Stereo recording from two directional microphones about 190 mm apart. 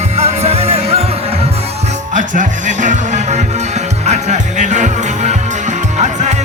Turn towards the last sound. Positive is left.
turn(degrees=-40)  # may be behind; listen again after turning